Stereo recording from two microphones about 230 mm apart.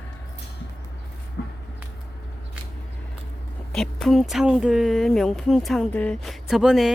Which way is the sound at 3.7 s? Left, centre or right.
Centre.